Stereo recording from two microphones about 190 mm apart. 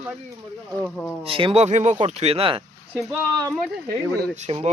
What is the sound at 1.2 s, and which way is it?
Speech, 30° right (ahead or behind).